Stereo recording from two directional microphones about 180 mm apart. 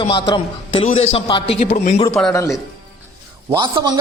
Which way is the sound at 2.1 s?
Centre (ahead or behind).